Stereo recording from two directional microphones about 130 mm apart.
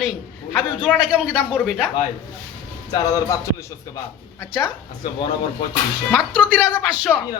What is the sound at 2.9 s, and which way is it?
Speech, 30° left (ahead or behind).